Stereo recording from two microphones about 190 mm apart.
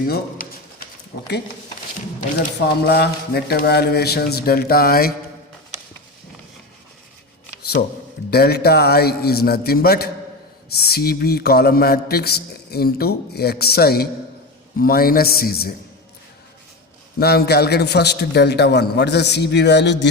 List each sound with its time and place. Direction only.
0.4 s a sound: 45° left (ahead or behind)
1.1 s a man's voice: 65° left (ahead or behind)
2.6 s a man's voice: 55° left (ahead or behind)
8.3 s a man's voice: 55° left (ahead or behind)
17.2 s a man's voice: 55° left (ahead or behind)